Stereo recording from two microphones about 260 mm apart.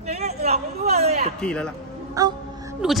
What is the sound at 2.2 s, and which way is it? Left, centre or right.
Speech, centre.